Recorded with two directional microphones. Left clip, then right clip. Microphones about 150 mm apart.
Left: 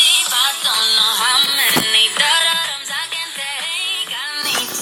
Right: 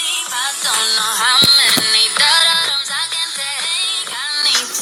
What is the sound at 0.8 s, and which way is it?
Music, 5° right (ahead or behind).